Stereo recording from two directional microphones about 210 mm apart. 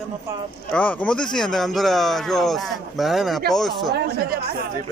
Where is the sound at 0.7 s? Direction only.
5° left (ahead or behind).